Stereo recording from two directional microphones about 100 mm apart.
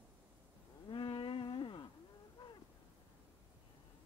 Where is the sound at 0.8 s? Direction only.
50° left (ahead or behind).